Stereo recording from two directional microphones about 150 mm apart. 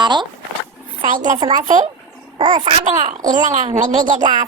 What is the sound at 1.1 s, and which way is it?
Speech, 60° right (ahead or behind).